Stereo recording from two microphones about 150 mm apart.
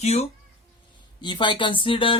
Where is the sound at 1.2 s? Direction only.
30° left (ahead or behind).